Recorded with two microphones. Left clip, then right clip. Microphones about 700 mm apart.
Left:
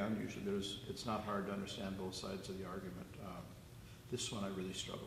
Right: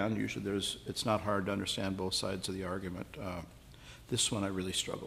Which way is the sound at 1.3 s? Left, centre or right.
Right.